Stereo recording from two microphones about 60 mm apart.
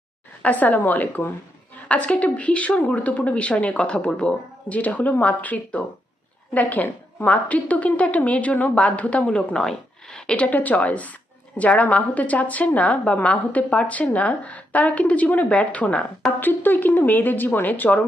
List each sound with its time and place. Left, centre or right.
0.4 s a woman's voice: left